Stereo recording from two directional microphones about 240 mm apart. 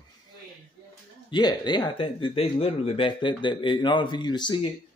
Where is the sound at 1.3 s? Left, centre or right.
Centre.